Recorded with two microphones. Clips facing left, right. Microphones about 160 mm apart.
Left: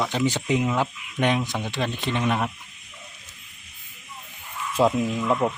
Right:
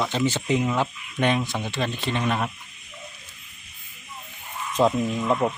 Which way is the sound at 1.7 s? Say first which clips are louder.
Even; 15° left (ahead or behind).